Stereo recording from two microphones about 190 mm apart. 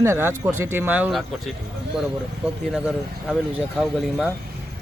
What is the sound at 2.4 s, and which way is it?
Speech, 5° right (ahead or behind).